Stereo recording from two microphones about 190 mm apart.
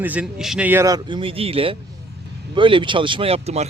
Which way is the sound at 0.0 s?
5° right (ahead or behind).